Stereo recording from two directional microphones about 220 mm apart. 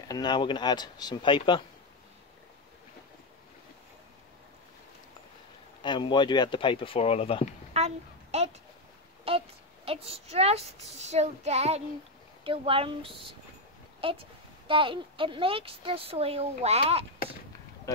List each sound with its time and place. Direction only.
0.1 s speech: 20° left (ahead or behind)
5.8 s speech: 20° left (ahead or behind)
7.7 s a sound: 30° right (ahead or behind)
9.8 s speech: 25° right (ahead or behind)
17.9 s speech: 15° left (ahead or behind)